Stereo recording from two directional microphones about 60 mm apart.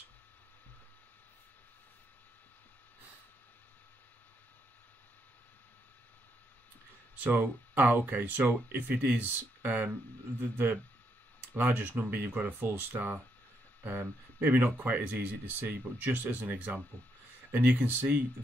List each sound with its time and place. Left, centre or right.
7.2 s speech: right
11.5 s speech: right